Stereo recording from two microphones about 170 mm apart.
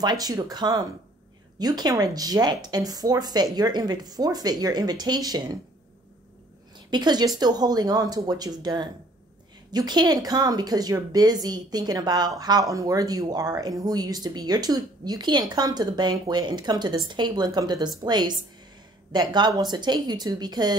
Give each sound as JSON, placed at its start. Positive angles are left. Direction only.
{"t": 0.0, "sound": "a woman's voice", "side_deg": -25}
{"t": 6.9, "sound": "a woman's voice", "side_deg": -25}